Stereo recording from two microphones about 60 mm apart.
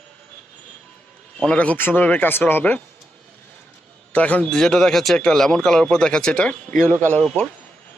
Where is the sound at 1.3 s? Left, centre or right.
Centre.